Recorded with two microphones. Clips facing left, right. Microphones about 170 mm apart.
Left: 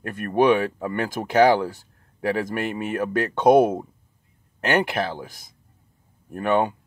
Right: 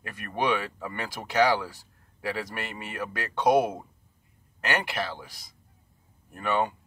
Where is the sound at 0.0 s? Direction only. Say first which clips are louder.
Left 10 dB; 55° left (ahead or behind).